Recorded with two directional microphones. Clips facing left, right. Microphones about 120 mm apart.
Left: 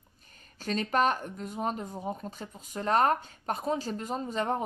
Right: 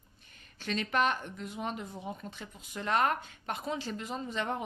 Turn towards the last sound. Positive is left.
turn(degrees=40)  # may be behind; listen again after turning